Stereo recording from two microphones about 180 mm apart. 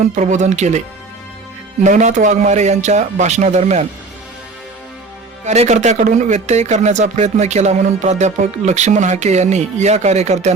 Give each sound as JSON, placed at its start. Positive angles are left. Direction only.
{"t": 0.1, "sound": "speech", "side_deg": -40}
{"t": 1.8, "sound": "speech", "side_deg": -40}
{"t": 5.5, "sound": "speech", "side_deg": -40}